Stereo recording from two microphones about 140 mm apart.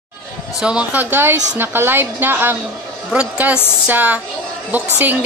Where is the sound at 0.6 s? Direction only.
5° right (ahead or behind).